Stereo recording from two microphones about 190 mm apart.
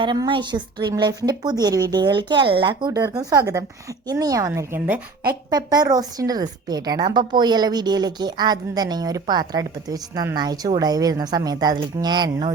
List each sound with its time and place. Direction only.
0.0 s a woman's voice: 25° right (ahead or behind)